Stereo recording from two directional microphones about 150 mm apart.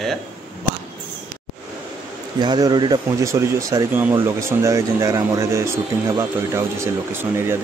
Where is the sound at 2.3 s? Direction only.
30° right (ahead or behind).